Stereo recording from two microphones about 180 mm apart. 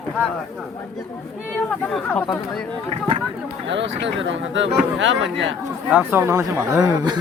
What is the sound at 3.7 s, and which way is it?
Speech, 90° right.